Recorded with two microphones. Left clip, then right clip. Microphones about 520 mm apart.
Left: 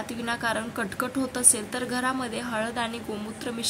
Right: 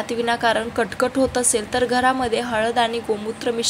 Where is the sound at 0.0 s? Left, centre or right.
Left.